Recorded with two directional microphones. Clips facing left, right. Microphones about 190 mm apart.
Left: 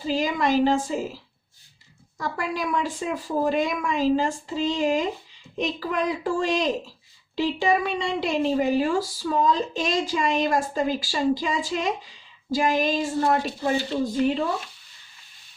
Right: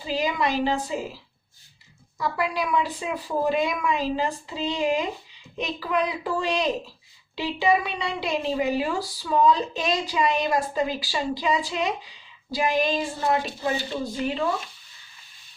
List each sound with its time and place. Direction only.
0.0 s a woman's voice: 45° left (ahead or behind)